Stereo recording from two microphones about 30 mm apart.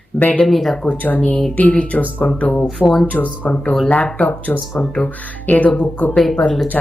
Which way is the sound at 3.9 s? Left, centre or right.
Left.